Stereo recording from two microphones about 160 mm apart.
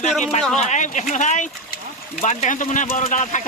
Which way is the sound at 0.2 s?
45° left (ahead or behind).